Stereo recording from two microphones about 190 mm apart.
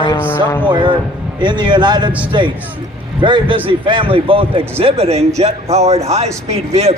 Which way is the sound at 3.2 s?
25° right (ahead or behind).